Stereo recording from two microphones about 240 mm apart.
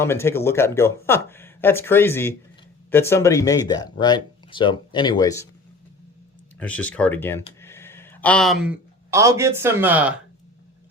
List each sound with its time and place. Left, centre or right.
0.0 s speech: centre
6.6 s speech: centre